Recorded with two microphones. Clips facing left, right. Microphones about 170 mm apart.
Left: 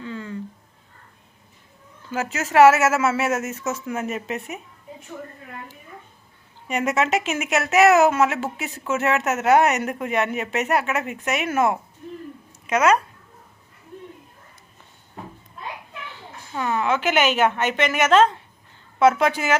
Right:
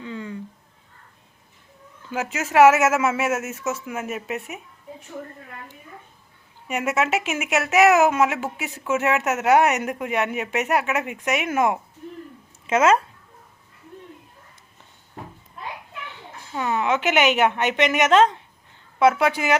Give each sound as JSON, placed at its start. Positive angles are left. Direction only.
{"t": 0.0, "sound": "cat", "side_deg": -15}
{"t": 2.0, "sound": "speech", "side_deg": -10}
{"t": 6.7, "sound": "speech", "side_deg": -5}
{"t": 12.6, "sound": "speech", "side_deg": -25}
{"t": 16.0, "sound": "a woman's voice", "side_deg": -20}